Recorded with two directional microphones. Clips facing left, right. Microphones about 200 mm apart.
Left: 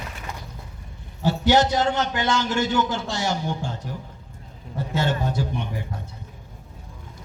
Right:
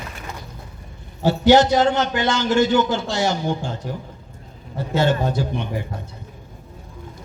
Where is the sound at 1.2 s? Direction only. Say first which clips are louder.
Right 5 dB; 75° right (ahead or behind).